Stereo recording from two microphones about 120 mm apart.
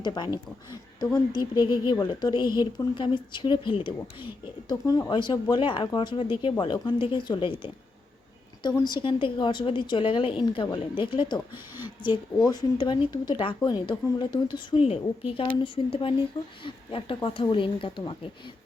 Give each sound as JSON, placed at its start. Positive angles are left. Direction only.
{"t": 0.0, "sound": "a woman's voice", "side_deg": 35}
{"t": 4.7, "sound": "speech", "side_deg": 30}
{"t": 8.8, "sound": "a woman's voice", "side_deg": 40}